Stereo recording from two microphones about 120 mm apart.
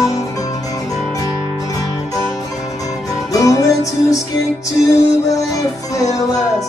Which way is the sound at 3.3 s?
30° left (ahead or behind).